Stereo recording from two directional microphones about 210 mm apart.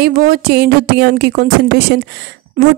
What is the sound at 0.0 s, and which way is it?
Speech, 45° right (ahead or behind).